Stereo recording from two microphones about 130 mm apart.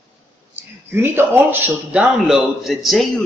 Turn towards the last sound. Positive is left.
turn(degrees=0)  # may be behind; listen again after turning